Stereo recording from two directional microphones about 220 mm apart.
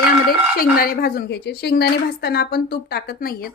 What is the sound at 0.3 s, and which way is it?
Speech, 40° left (ahead or behind).